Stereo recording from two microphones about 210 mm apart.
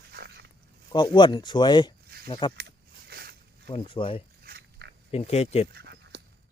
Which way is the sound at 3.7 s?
25° left (ahead or behind).